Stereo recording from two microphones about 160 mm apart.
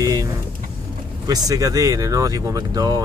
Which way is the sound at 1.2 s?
20° right (ahead or behind).